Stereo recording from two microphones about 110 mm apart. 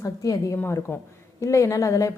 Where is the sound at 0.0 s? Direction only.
30° left (ahead or behind).